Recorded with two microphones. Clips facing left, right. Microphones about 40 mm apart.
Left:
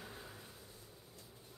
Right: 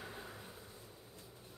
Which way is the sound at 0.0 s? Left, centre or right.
Centre.